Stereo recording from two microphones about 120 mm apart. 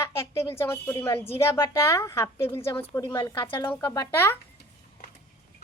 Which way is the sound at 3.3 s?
45° left (ahead or behind).